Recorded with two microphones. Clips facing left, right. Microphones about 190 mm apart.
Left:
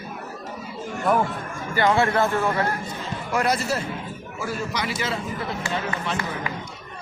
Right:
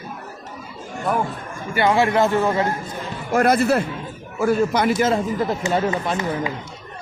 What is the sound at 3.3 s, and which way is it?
A man's voice, 50° right (ahead or behind).